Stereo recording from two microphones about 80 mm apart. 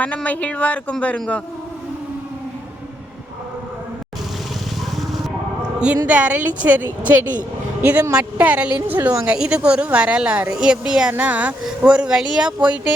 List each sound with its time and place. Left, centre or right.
0.0 s speech: centre
6.1 s a woman's voice: centre